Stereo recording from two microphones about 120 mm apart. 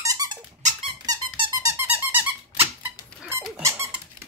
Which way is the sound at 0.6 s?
80° right.